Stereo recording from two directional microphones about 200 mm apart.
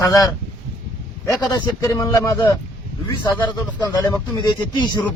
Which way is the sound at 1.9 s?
20° left (ahead or behind).